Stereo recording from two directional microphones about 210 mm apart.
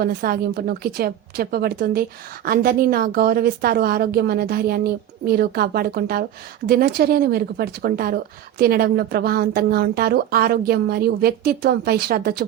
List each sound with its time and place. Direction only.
0.0 s a woman's voice: 45° right (ahead or behind)